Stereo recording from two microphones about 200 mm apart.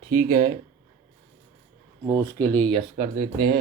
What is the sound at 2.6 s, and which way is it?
Speech, 30° right (ahead or behind).